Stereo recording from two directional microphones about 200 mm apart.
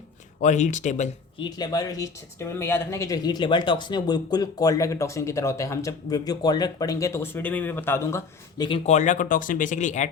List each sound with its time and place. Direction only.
0.4 s speech: 35° left (ahead or behind)
1.4 s speech: 20° left (ahead or behind)
8.9 s speech: 35° left (ahead or behind)